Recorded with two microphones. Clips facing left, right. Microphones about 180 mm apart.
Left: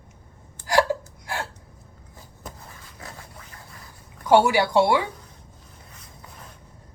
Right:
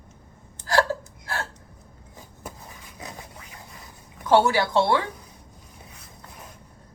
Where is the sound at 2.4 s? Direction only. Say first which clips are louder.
Right 1 dB; 15° right (ahead or behind).